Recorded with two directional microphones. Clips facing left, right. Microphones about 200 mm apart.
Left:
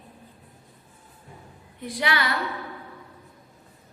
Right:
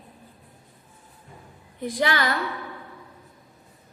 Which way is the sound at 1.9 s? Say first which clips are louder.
Right 3 dB; 45° right (ahead or behind).